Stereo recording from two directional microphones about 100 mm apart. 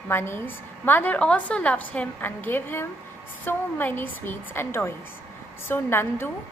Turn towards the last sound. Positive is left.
turn(degrees=25)  # may be behind; listen again after turning